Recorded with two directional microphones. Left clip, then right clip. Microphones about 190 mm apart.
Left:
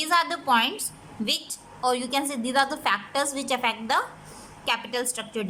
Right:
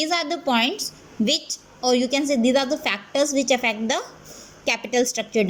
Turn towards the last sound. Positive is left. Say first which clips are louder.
# right 8 dB
turn(degrees=-20)  # may be behind; listen again after turning